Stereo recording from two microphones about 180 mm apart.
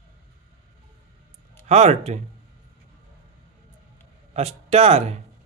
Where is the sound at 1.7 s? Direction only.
40° right (ahead or behind).